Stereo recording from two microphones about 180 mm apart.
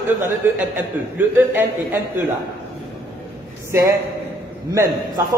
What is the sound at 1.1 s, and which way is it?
Speech, 10° right (ahead or behind).